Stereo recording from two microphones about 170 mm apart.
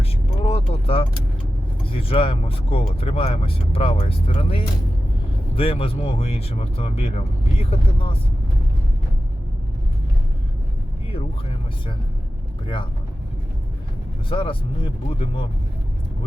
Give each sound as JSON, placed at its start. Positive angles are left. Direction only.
{"t": 0.4, "sound": "mechanisms", "side_deg": 35}
{"t": 1.8, "sound": "speech", "side_deg": 35}
{"t": 12.6, "sound": "speech", "side_deg": 30}
{"t": 14.3, "sound": "speech", "side_deg": 30}